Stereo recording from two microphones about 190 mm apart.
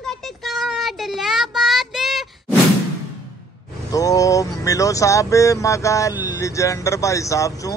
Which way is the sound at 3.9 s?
20° left (ahead or behind).